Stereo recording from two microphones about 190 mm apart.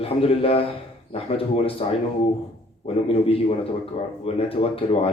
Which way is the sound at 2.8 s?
30° left (ahead or behind).